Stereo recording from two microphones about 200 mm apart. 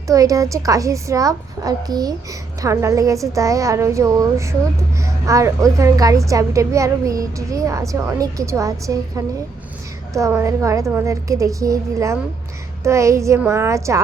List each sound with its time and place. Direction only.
0.1 s a woman's voice: 15° right (ahead or behind)